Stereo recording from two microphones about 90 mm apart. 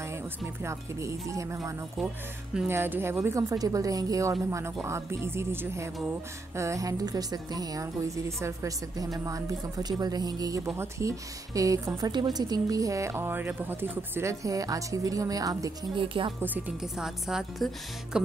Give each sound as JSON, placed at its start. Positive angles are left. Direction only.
{"t": 0.7, "sound": "a woman's voice", "side_deg": -35}
{"t": 2.7, "sound": "a woman's voice", "side_deg": -25}
{"t": 12.0, "sound": "a woman's voice", "side_deg": -50}
{"t": 14.4, "sound": "a woman's voice", "side_deg": -40}
{"t": 16.0, "sound": "speech", "side_deg": -75}
{"t": 16.3, "sound": "speech", "side_deg": -20}
{"t": 16.8, "sound": "a woman's voice", "side_deg": -5}